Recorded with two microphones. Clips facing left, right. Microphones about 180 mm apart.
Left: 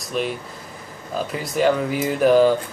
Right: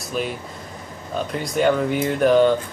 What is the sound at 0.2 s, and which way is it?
Speech, centre (ahead or behind).